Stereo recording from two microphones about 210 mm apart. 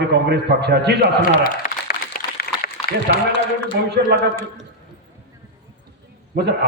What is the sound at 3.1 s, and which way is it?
Speech, 50° right (ahead or behind).